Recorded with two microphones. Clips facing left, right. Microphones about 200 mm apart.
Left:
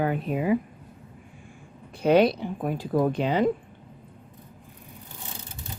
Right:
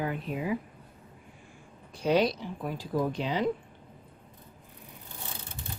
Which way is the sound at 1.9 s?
60° left (ahead or behind).